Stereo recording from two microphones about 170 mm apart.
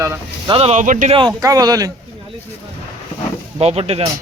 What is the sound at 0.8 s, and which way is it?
Speech, 50° right (ahead or behind).